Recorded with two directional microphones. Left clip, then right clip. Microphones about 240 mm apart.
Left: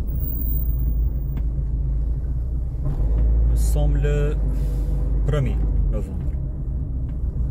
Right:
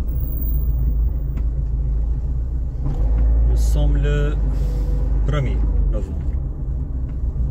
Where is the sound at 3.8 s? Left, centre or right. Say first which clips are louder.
Even; left.